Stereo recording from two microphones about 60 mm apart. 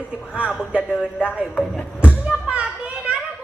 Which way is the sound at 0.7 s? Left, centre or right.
Right.